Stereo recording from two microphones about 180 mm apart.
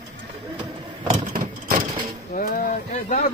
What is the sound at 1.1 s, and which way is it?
Vehicle, 50° right (ahead or behind).